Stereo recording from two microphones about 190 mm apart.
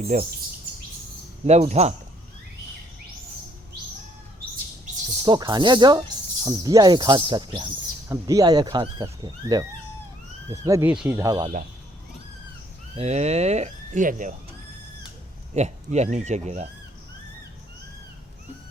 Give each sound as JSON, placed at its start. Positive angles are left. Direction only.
{"t": 0.0, "sound": "speech", "side_deg": -40}
{"t": 1.5, "sound": "speech", "side_deg": -35}
{"t": 5.2, "sound": "speech", "side_deg": -25}
{"t": 10.7, "sound": "speech", "side_deg": -15}
{"t": 11.2, "sound": "speech", "side_deg": -20}
{"t": 13.0, "sound": "speech", "side_deg": -35}
{"t": 15.5, "sound": "speech", "side_deg": -35}